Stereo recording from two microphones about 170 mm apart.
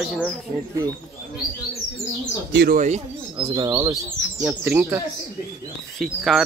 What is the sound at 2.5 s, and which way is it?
Speech, 70° right (ahead or behind).